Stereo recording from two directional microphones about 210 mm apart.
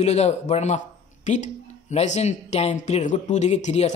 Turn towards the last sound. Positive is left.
turn(degrees=30)  # may be behind; listen again after turning